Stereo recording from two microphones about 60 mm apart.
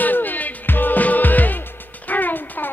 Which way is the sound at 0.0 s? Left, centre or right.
Left.